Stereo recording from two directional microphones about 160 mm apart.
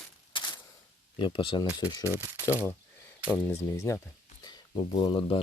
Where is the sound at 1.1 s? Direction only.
30° left (ahead or behind).